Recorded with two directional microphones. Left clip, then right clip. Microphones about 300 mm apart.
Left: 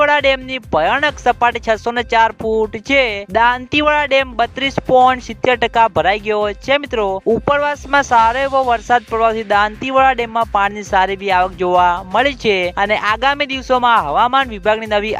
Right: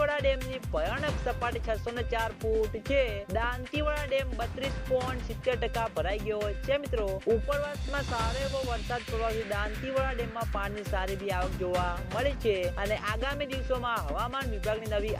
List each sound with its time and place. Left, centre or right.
0.0 s speech: left